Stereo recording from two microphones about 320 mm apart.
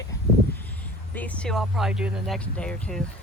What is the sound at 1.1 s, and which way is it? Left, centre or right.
Speech, centre.